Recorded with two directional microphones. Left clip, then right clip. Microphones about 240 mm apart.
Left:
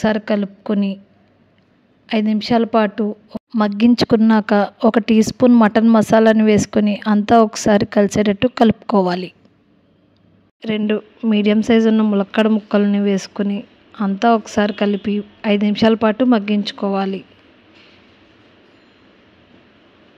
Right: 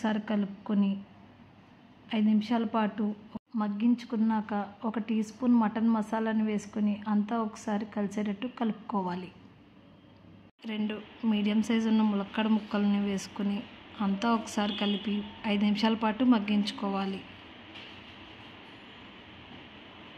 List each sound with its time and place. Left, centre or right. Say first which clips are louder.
0.0 s speech: left 14 dB; left
2.0 s a woman's voice: left 11 dB; left
10.6 s speech: left 16 dB; left